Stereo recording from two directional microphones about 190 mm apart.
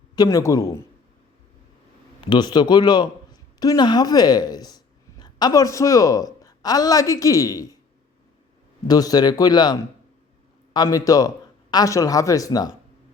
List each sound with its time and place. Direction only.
0.2 s speech: 15° left (ahead or behind)
2.3 s a woman's voice: 20° left (ahead or behind)
8.9 s a woman's voice: 20° left (ahead or behind)